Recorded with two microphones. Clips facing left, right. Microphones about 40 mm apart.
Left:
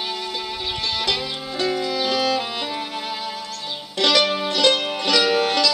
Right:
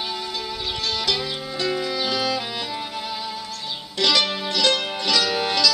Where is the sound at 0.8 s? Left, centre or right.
Left.